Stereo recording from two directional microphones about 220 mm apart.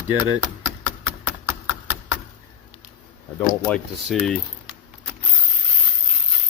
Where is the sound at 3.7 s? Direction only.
Centre (ahead or behind).